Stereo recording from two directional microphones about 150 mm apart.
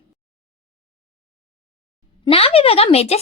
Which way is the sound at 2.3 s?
40° left (ahead or behind).